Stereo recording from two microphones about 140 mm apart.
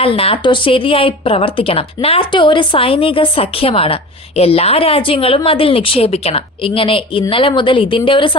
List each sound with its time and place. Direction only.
0.0 s speech: 40° left (ahead or behind)